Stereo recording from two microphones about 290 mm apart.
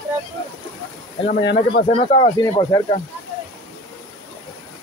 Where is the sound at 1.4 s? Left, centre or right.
Left; by 2.9 s centre.